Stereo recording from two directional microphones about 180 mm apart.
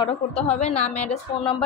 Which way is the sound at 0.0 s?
35° left (ahead or behind).